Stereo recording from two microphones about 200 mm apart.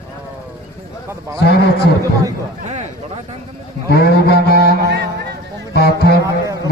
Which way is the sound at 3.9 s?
50° left (ahead or behind).